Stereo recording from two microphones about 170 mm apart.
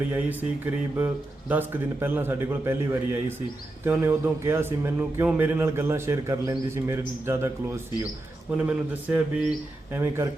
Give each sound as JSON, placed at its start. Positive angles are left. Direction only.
{"t": 0.1, "sound": "speech", "side_deg": -10}